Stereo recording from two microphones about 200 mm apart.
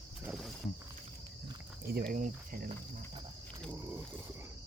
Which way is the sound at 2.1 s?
45° right (ahead or behind).